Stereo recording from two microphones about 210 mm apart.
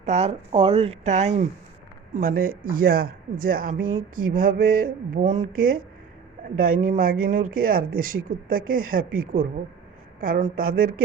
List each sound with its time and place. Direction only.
0.0 s speech: 30° right (ahead or behind)
2.1 s speech: 45° right (ahead or behind)